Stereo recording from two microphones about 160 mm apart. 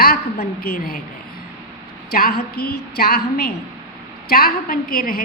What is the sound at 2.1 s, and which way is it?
Speech, 75° left (ahead or behind).